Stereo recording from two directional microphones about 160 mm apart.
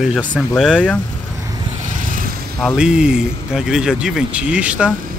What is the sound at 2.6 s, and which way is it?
Speech, 5° right (ahead or behind).